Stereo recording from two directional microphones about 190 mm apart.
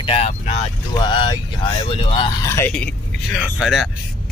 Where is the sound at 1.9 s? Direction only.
30° left (ahead or behind).